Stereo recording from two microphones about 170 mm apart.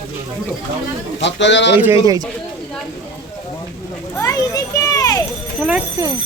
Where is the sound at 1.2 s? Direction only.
90° left.